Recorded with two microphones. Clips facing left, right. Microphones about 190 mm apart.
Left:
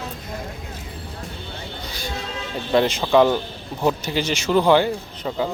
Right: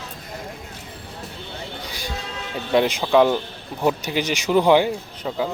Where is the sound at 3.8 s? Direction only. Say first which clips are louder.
Even; 15° right (ahead or behind).